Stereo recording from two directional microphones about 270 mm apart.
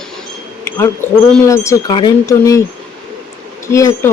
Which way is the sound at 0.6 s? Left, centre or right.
Centre.